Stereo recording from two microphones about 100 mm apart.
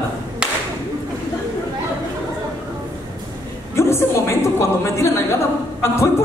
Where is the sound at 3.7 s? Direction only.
25° left (ahead or behind).